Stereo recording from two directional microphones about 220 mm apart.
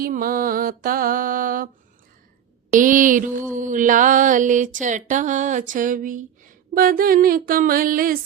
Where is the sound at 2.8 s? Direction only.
35° right (ahead or behind).